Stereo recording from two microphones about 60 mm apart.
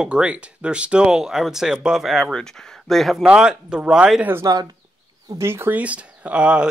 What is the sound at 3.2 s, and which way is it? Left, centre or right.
Speech, centre.